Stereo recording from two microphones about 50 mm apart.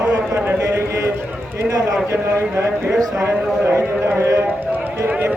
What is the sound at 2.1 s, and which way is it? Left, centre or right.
A man's voice, right.